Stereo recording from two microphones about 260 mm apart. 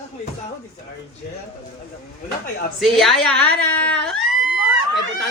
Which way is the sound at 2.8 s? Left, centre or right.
Centre.